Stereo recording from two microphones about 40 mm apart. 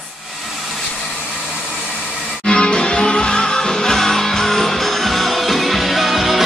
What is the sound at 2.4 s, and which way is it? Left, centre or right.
Music, left.